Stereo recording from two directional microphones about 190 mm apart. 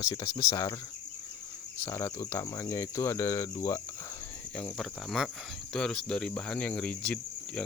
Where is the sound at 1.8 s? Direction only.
15° left (ahead or behind).